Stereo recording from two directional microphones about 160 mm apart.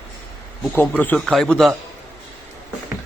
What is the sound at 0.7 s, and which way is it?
A man's voice, 10° left (ahead or behind).